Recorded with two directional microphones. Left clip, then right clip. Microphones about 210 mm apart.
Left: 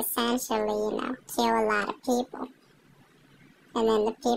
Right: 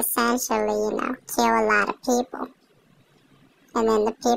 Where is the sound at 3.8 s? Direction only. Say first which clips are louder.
Right 3 dB; 20° right (ahead or behind).